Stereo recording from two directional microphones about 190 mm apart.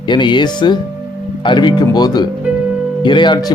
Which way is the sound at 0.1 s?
25° left (ahead or behind).